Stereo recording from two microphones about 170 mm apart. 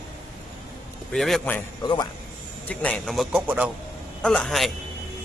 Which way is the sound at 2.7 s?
5° left (ahead or behind).